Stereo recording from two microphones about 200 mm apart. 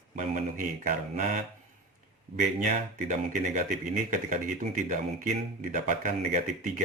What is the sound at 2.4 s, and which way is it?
Speech, 40° right (ahead or behind).